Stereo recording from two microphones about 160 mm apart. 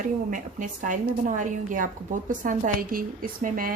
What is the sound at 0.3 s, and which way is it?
Speech, 55° right (ahead or behind).